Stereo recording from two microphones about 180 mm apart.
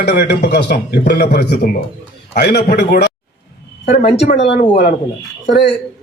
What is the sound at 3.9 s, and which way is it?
Speech, 40° left (ahead or behind).